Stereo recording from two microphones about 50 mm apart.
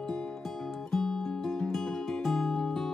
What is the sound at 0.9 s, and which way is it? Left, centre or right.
Music, centre.